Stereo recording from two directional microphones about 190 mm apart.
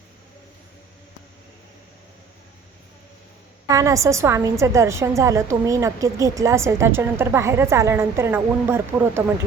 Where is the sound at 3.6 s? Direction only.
15° right (ahead or behind).